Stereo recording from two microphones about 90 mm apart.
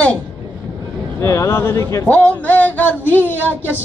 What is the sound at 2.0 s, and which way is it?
A man's voice, 15° left (ahead or behind).